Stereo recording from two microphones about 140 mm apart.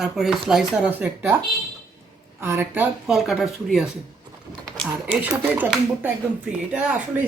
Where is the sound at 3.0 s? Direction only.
5° right (ahead or behind).